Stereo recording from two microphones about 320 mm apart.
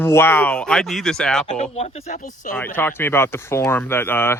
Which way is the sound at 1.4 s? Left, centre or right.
Centre.